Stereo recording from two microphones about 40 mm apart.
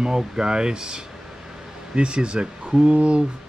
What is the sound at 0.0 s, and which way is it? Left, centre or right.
Speech, centre.